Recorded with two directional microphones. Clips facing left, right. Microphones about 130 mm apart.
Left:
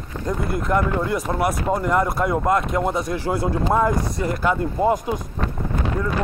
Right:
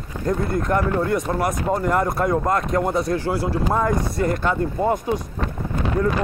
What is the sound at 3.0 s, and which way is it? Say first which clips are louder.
Speech: right 1 dB; 20° left (ahead or behind).